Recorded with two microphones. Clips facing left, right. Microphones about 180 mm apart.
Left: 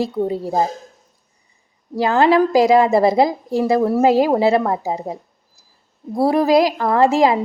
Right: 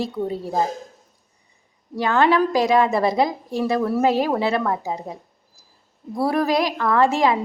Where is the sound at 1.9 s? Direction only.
30° left (ahead or behind).